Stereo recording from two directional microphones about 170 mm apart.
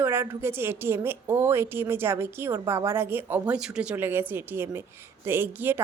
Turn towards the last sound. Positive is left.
turn(degrees=-10)  # may be behind; listen again after turning